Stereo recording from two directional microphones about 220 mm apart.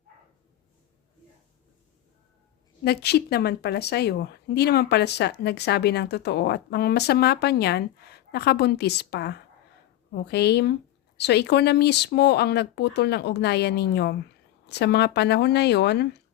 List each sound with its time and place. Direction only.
2.8 s a woman's voice: 45° left (ahead or behind)